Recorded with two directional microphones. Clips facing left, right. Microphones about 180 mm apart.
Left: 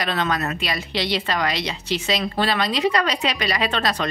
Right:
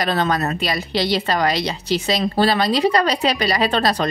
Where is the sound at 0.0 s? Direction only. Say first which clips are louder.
Right 4 dB; 40° right (ahead or behind).